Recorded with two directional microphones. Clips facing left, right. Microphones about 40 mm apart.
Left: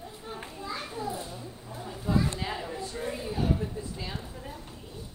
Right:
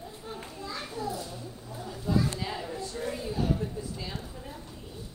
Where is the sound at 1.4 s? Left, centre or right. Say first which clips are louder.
Even; left.